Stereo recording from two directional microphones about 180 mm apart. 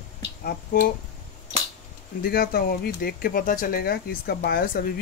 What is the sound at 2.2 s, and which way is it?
Speech, 55° left (ahead or behind).